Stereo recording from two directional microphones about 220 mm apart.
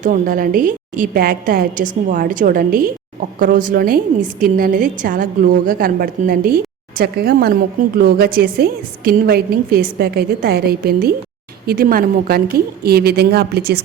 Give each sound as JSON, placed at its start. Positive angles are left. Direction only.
{"t": 0.0, "sound": "a woman's voice", "side_deg": -40}